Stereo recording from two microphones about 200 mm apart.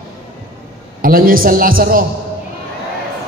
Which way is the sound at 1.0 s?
45° right (ahead or behind).